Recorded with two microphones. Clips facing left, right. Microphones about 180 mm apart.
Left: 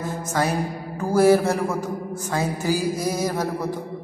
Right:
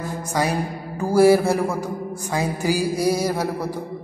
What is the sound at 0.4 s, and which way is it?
A man's voice, 10° right (ahead or behind).